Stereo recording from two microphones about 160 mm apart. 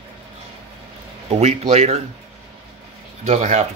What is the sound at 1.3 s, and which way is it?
Speech, 40° right (ahead or behind).